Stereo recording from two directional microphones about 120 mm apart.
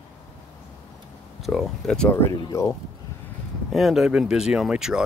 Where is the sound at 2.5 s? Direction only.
25° left (ahead or behind).